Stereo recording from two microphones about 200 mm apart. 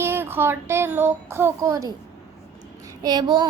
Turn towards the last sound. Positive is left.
turn(degrees=-20)  # may be behind; listen again after turning